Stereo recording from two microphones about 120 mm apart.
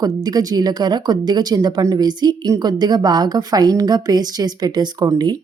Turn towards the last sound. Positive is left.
turn(degrees=-35)  # may be behind; listen again after turning